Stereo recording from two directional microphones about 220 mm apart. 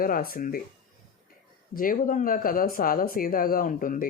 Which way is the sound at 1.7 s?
40° left (ahead or behind).